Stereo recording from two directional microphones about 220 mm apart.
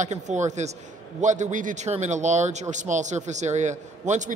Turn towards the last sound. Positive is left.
turn(degrees=-35)  # may be behind; listen again after turning